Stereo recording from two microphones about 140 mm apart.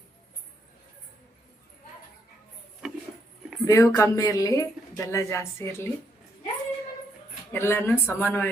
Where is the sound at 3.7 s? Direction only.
20° left (ahead or behind).